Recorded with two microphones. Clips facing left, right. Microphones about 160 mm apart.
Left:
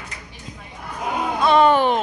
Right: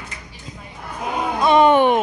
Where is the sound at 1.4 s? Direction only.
15° right (ahead or behind).